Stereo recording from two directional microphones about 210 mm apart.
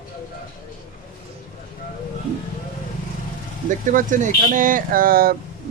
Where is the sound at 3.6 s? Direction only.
40° right (ahead or behind).